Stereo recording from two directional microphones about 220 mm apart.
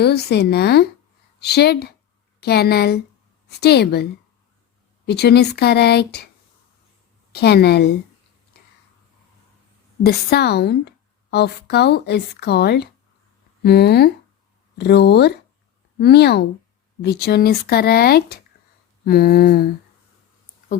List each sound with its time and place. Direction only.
0.0 s speech: 45° left (ahead or behind)
5.0 s speech: 50° left (ahead or behind)
7.3 s speech: 50° left (ahead or behind)
10.0 s speech: 45° left (ahead or behind)